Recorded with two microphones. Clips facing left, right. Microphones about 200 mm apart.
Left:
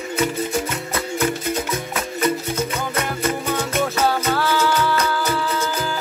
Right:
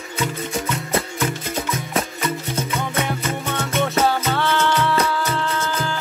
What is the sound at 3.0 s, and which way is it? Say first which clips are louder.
Music: left 3 dB; centre (ahead or behind).